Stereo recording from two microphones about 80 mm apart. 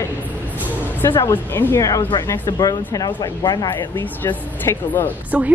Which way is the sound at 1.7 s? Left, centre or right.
Left.